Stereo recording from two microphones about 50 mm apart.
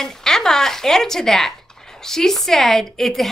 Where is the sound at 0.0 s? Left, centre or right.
Centre.